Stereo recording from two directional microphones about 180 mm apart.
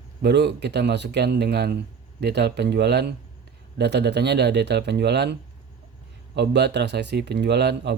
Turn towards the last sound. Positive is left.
turn(degrees=-70)  # may be behind; listen again after turning